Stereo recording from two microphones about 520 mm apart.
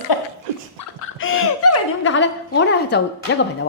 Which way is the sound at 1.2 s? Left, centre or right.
Left.